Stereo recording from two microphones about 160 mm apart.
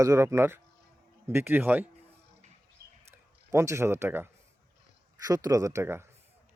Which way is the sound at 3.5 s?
20° right (ahead or behind).